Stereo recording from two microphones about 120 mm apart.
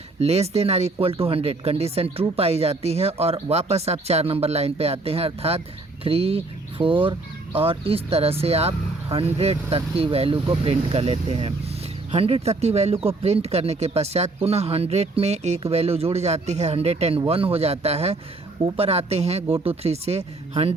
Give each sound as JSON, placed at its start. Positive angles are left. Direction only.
{"t": 0.2, "sound": "speech", "side_deg": -60}